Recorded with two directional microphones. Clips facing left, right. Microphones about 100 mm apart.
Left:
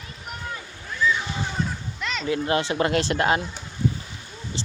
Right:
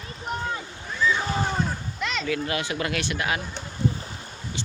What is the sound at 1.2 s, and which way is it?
Boat, 40° right (ahead or behind).